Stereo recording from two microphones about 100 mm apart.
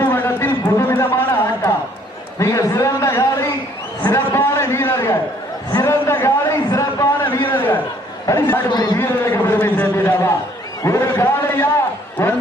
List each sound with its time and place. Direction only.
0.0 s a sound: 20° left (ahead or behind)
2.4 s a man's voice: 30° left (ahead or behind)
8.3 s a man's voice: 30° left (ahead or behind)
8.7 s a man's voice: 45° left (ahead or behind)
9.0 s a man's voice: 20° left (ahead or behind)